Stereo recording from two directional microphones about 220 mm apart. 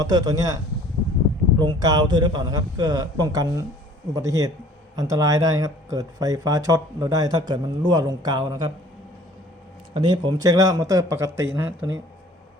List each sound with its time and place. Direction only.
0.0 s speech: 15° right (ahead or behind)
9.9 s speech: 20° right (ahead or behind)